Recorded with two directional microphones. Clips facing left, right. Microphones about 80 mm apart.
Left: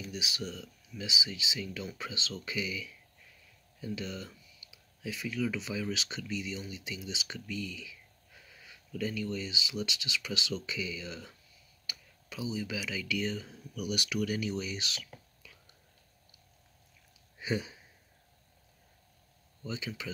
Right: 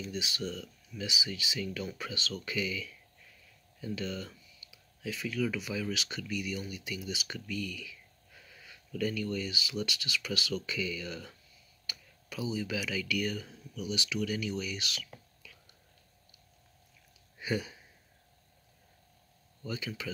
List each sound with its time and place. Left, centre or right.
0.0 s speech: centre
14.2 s speech: left
15.4 s whispering: left
17.4 s speech: left
19.6 s speech: centre